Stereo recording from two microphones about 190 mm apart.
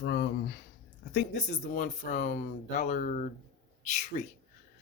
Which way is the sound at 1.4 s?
45° left (ahead or behind).